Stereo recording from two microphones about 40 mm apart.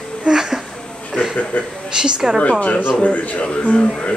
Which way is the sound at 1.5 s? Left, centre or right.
Left.